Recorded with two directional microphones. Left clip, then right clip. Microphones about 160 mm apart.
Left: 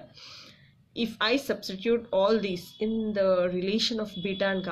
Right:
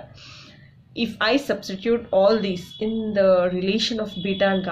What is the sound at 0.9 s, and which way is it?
Speech, 30° left (ahead or behind).